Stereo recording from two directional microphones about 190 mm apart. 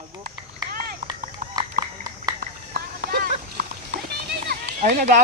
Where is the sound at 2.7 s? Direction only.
50° right (ahead or behind).